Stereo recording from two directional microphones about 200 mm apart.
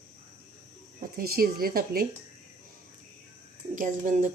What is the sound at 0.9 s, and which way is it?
Speech, 50° right (ahead or behind).